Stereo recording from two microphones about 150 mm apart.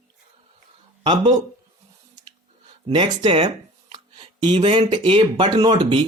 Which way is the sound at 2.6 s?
35° right (ahead or behind).